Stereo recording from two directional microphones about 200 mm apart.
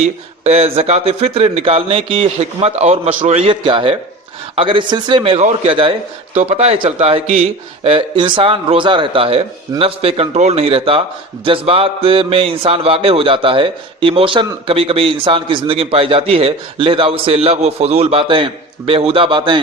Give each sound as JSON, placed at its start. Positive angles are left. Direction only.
{"t": 0.4, "sound": "speech", "side_deg": -30}